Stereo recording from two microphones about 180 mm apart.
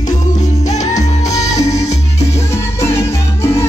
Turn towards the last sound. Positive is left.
turn(degrees=15)  # may be behind; listen again after turning